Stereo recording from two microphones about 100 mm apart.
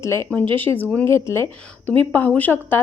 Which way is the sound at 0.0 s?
25° left (ahead or behind).